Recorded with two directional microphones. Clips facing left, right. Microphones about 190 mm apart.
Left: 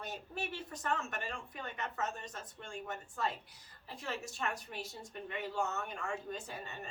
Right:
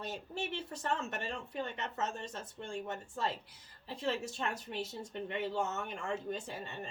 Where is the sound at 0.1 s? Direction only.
25° right (ahead or behind).